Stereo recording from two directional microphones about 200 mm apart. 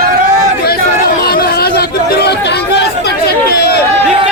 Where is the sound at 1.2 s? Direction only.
50° left (ahead or behind).